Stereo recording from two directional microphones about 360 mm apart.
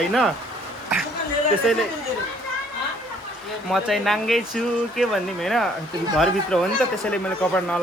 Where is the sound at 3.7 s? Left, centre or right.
Centre.